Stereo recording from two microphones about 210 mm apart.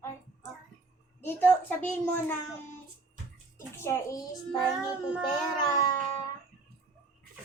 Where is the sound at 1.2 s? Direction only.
10° left (ahead or behind).